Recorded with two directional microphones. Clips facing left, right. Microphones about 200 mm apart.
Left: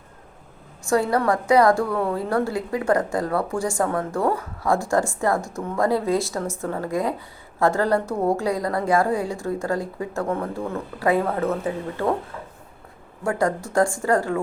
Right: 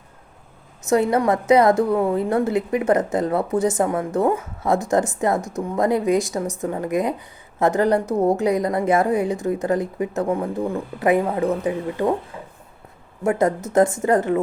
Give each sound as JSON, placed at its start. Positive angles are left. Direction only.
{"t": 0.9, "sound": "a woman's voice", "side_deg": -20}